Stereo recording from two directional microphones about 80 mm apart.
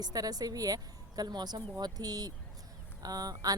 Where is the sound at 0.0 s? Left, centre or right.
Right.